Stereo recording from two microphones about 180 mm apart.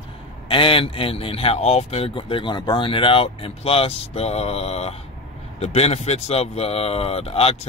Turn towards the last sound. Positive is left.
turn(degrees=35)  # may be behind; listen again after turning